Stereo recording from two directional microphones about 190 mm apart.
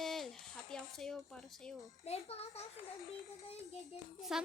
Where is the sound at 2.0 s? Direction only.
35° left (ahead or behind).